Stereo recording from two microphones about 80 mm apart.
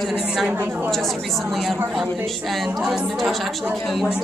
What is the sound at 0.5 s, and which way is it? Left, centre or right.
Speech, right.